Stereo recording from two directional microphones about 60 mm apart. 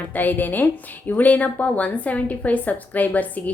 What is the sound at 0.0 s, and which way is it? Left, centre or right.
A woman's voice, left.